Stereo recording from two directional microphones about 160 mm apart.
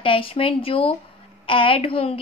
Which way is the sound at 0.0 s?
35° left (ahead or behind).